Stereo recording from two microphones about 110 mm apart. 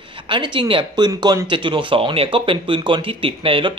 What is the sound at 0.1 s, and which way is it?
Speech, 50° right (ahead or behind).